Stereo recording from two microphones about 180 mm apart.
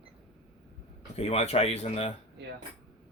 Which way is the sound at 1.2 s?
35° left (ahead or behind).